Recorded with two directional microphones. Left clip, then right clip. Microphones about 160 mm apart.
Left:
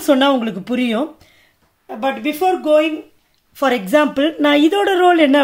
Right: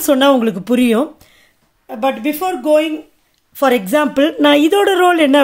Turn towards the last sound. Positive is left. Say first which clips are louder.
# right 1 dB
turn(degrees=-35)  # may be behind; listen again after turning